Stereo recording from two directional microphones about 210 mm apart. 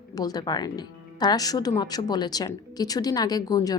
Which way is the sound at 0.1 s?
15° left (ahead or behind).